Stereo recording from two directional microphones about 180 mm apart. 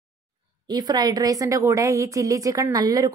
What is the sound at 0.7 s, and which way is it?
A woman's voice, 20° right (ahead or behind).